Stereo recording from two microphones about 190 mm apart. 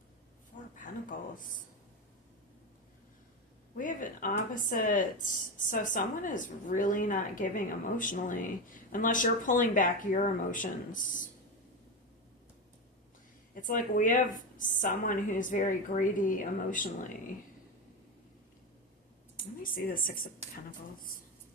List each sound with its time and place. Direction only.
0.5 s a sound: 45° left (ahead or behind)
1.4 s speech: 45° left (ahead or behind)
3.8 s speech: 45° left (ahead or behind)
13.5 s speech: 45° left (ahead or behind)
19.4 s speech: 50° left (ahead or behind)